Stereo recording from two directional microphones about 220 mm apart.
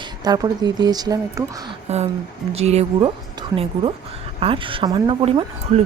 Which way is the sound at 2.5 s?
30° right (ahead or behind).